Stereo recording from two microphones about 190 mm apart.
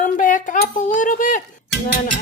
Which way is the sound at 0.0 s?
45° left (ahead or behind).